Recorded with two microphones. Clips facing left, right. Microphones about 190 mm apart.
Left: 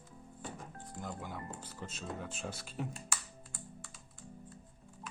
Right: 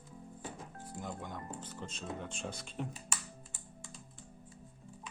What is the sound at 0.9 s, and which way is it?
Speech, centre (ahead or behind).